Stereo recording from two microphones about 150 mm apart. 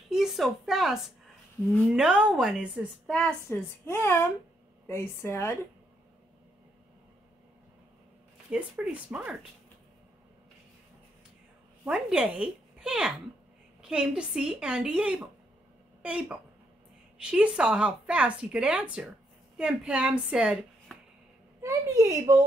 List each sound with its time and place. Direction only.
0.1 s a woman's voice: centre (ahead or behind)
3.4 s speech: 15° left (ahead or behind)
8.5 s speech: 10° right (ahead or behind)
11.8 s a woman's voice: 5° right (ahead or behind)
21.5 s speech: 20° right (ahead or behind)